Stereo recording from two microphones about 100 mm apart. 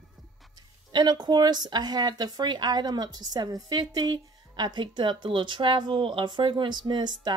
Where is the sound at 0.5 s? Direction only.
45° right (ahead or behind).